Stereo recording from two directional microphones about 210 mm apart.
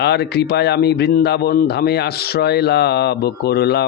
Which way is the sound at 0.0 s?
50° left (ahead or behind).